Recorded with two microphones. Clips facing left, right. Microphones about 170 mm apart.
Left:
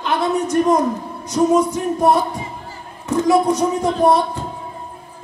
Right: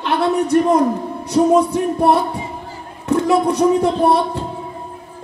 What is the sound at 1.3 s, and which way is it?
A man's voice, 60° right (ahead or behind).